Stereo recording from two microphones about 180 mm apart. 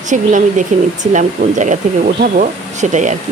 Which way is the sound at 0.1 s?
45° right (ahead or behind).